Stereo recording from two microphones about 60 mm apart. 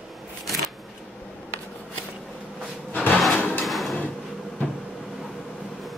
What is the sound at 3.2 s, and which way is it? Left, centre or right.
Drawer open or close, centre.